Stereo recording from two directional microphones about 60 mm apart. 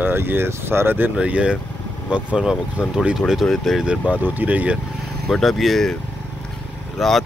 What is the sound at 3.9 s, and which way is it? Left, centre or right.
Speech, right.